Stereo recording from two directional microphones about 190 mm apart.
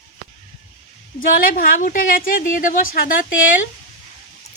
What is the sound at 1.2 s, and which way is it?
A woman's voice, 50° left (ahead or behind).